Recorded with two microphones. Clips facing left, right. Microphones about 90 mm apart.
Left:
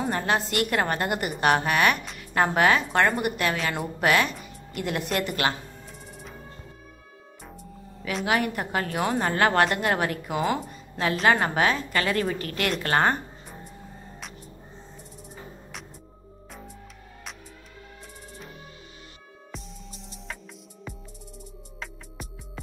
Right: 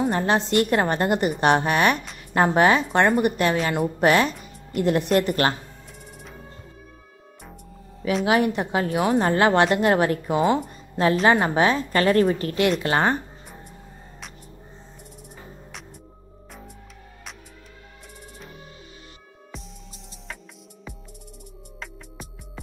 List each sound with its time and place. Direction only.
0.1 s a woman's voice: 30° right (ahead or behind)
8.3 s a woman's voice: 25° right (ahead or behind)
9.2 s a woman's voice: 25° right (ahead or behind)
21.7 s music: centre (ahead or behind)